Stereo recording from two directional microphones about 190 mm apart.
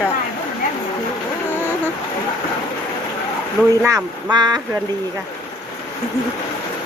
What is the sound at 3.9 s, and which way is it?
Speech, 20° right (ahead or behind).